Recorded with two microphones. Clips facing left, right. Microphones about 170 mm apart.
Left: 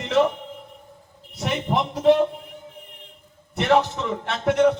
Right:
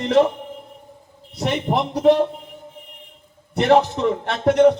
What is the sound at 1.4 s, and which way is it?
Speech, 35° right (ahead or behind).